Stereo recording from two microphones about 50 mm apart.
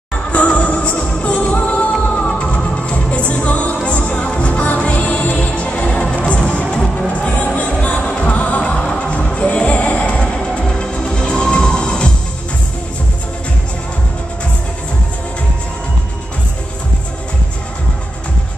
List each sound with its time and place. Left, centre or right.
0.3 s music: left
8.6 s music: centre